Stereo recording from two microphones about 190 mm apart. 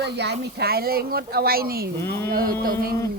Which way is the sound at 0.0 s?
60° right (ahead or behind).